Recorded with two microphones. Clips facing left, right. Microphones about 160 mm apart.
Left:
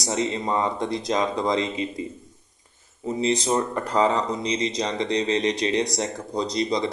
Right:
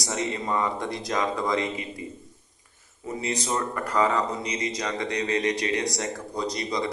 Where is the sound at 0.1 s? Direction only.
25° left (ahead or behind).